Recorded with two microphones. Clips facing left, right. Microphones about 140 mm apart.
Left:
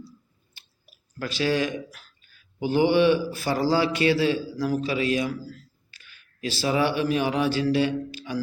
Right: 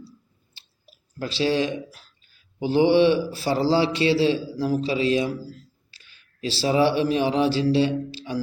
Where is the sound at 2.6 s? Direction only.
30° right (ahead or behind).